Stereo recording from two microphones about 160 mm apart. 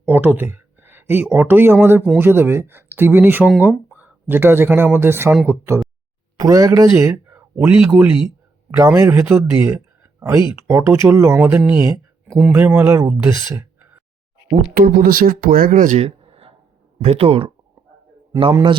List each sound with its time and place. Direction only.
0.1 s speech: 10° right (ahead or behind)
8.7 s speech: 20° right (ahead or behind)
14.8 s speech: 65° right (ahead or behind)
16.0 s a sound: 35° right (ahead or behind)
17.0 s speech: 40° right (ahead or behind)